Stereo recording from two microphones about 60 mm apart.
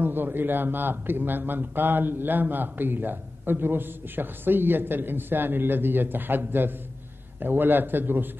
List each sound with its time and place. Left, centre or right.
0.0 s a man's voice: right